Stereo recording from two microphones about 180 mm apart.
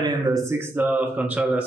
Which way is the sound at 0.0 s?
20° right (ahead or behind).